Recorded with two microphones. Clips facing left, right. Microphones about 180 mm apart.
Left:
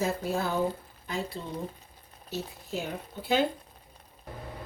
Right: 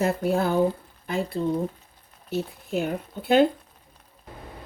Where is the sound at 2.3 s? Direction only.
55° right (ahead or behind).